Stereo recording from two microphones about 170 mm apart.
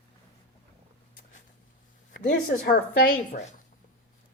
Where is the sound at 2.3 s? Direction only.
55° left (ahead or behind).